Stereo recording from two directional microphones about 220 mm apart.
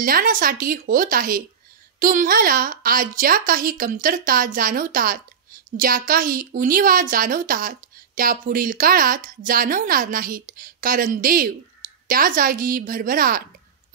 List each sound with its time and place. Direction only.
0.0 s a woman's voice: 40° right (ahead or behind)